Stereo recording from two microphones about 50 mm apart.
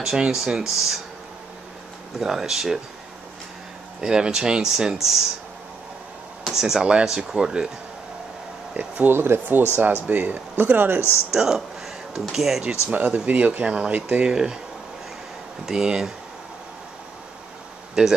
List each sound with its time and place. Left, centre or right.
0.3 s speech: centre
2.1 s speech: centre
4.0 s speech: centre
6.4 s speech: centre
8.7 s speech: right
9.1 s speech: right
10.0 s speech: right
11.0 s speech: left
11.3 s speech: centre
12.9 s speech: right
13.2 s speech: right
15.6 s speech: centre
18.0 s speech: centre